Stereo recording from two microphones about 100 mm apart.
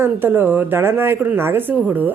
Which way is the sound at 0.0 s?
20° right (ahead or behind).